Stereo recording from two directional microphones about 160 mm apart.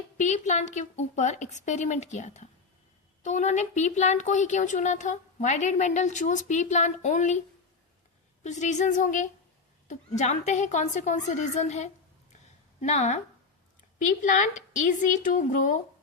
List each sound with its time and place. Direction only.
0.2 s a woman's voice: 50° left (ahead or behind)
8.4 s a woman's voice: 50° left (ahead or behind)